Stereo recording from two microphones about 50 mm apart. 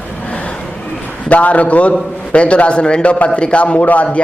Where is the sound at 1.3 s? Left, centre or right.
Left.